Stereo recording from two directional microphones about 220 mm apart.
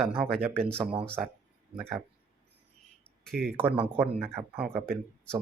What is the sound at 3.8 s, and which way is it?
Speech, 10° right (ahead or behind).